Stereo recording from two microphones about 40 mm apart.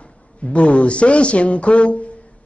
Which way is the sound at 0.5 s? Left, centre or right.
Left.